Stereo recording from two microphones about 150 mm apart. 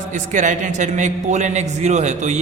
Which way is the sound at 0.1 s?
55° right (ahead or behind).